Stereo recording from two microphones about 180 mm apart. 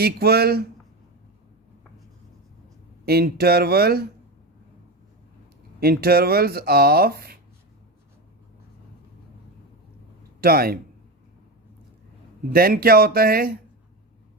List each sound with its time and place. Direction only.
0.0 s speech: 60° right (ahead or behind)
3.1 s speech: 60° right (ahead or behind)
5.8 s speech: 60° right (ahead or behind)
10.4 s speech: 55° right (ahead or behind)
12.5 s speech: 55° right (ahead or behind)